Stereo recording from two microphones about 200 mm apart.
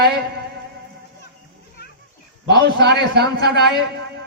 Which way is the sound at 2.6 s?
55° right (ahead or behind).